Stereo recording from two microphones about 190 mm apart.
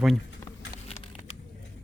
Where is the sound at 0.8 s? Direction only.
35° left (ahead or behind).